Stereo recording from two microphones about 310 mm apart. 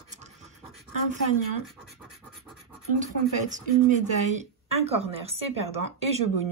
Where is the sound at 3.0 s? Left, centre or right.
Right.